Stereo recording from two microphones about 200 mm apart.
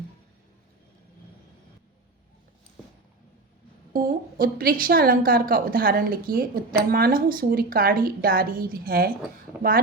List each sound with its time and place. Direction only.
3.9 s a woman's voice: 45° right (ahead or behind)